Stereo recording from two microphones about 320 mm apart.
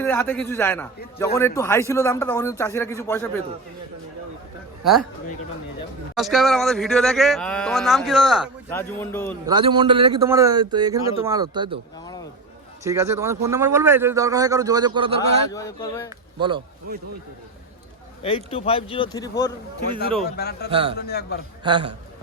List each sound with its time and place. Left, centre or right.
0.0 s a man's voice: centre
4.8 s a man's voice: centre
6.1 s speech: centre
9.5 s a man's voice: centre
12.8 s a man's voice: centre
15.4 s a man's voice: centre
18.2 s a man's voice: centre
20.3 s a man's voice: left
20.7 s a man's voice: centre
20.9 s a man's voice: left
21.6 s a man's voice: centre